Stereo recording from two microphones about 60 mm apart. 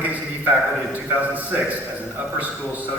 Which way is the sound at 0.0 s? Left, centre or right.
Right.